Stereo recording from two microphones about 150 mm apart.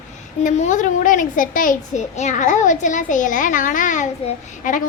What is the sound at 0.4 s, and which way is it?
A woman's voice, 55° left (ahead or behind).